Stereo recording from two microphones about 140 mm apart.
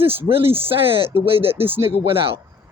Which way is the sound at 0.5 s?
40° right (ahead or behind).